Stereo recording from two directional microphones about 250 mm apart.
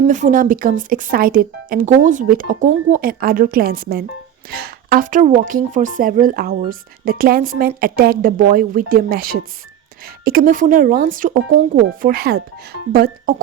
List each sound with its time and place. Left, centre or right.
0.1 s speech: right